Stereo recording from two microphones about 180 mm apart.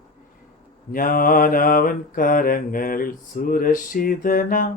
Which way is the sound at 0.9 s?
50° left (ahead or behind).